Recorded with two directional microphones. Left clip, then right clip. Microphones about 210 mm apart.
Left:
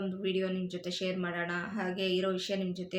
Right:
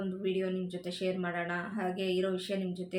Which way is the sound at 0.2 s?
15° left (ahead or behind).